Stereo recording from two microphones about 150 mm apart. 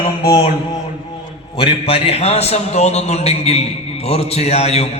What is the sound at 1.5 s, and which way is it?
A man's voice, 40° left (ahead or behind).